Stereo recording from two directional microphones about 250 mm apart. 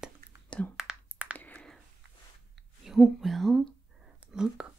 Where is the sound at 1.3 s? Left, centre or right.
Centre.